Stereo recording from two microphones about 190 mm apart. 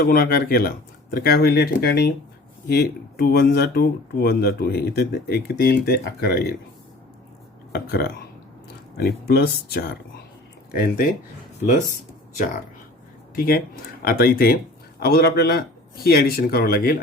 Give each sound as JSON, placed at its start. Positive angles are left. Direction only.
{"t": 0.0, "sound": "speech", "side_deg": 50}
{"t": 7.7, "sound": "speech", "side_deg": 55}
{"t": 13.3, "sound": "speech", "side_deg": 50}